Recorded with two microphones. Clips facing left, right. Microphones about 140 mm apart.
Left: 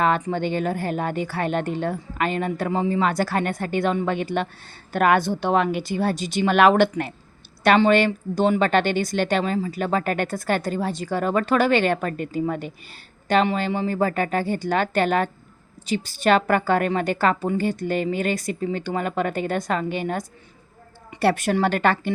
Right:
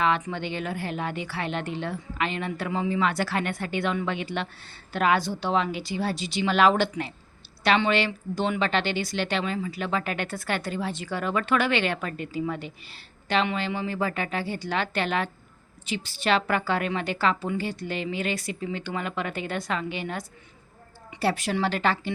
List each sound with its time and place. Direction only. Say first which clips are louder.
0.0 s a woman's voice: left 4 dB; 45° left (ahead or behind)
21.2 s a woman's voice: left 5 dB; 55° left (ahead or behind)